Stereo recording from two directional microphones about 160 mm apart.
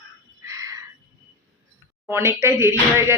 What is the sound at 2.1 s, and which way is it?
Speech, 15° right (ahead or behind).